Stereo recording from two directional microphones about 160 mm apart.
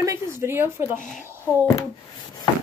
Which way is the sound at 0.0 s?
20° right (ahead or behind).